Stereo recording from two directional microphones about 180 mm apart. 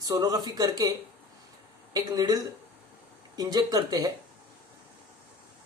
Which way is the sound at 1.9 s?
20° right (ahead or behind).